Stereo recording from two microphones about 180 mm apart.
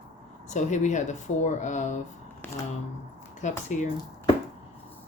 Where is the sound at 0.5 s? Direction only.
40° left (ahead or behind).